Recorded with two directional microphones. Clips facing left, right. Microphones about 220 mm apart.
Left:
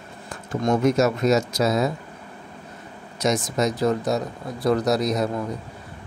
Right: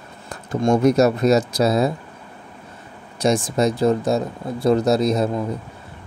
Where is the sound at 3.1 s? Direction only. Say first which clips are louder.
Right 4 dB; 30° right (ahead or behind).